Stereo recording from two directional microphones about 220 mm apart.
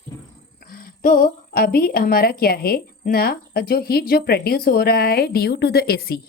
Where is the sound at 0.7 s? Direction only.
40° left (ahead or behind).